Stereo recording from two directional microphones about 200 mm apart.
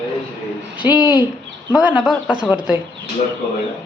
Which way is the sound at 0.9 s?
20° left (ahead or behind).